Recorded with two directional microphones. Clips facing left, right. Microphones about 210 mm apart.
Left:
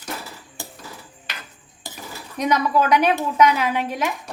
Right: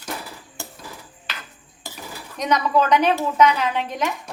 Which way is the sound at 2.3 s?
10° left (ahead or behind).